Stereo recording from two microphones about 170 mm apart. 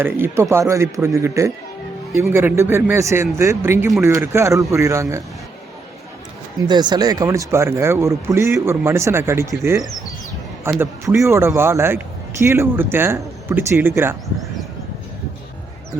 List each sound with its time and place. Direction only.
0.0 s a man's voice: 15° right (ahead or behind)
6.7 s a man's voice: 25° right (ahead or behind)